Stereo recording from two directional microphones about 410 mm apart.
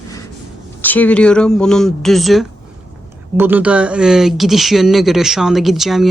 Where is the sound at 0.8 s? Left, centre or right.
Centre.